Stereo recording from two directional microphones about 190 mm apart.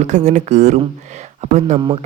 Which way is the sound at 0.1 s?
40° right (ahead or behind).